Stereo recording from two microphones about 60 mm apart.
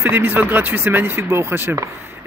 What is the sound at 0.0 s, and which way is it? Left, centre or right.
Speech, right.